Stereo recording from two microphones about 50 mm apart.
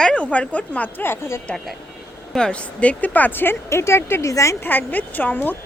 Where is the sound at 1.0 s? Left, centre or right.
Left.